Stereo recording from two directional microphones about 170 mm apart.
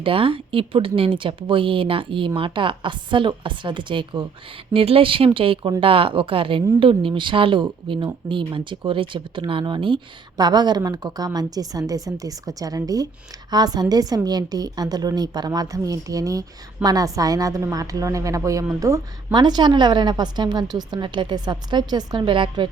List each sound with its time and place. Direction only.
0.0 s speech: 30° right (ahead or behind)